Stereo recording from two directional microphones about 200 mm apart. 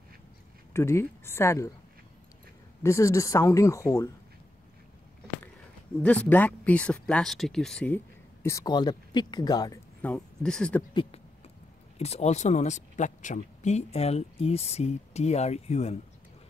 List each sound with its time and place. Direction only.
0.7 s speech: 15° left (ahead or behind)
2.8 s speech: 15° left (ahead or behind)
6.0 s speech: 10° left (ahead or behind)
10.0 s speech: 5° left (ahead or behind)
10.9 s speech: 25° left (ahead or behind)